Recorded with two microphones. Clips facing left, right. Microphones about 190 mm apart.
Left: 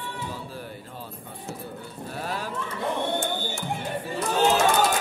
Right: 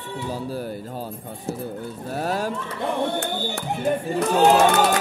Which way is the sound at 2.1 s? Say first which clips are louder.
Right 7 dB; 45° right (ahead or behind).